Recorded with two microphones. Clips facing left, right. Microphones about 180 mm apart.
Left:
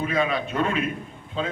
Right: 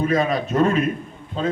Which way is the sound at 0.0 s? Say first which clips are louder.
Right 4 dB; 40° right (ahead or behind).